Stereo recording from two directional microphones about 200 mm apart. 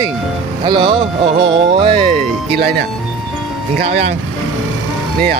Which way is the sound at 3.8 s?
30° right (ahead or behind).